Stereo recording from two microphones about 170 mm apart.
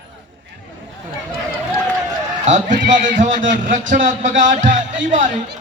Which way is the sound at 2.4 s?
45° right (ahead or behind).